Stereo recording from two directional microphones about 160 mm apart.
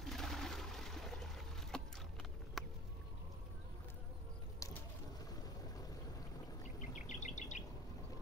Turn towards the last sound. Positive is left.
turn(degrees=50)  # may be behind; listen again after turning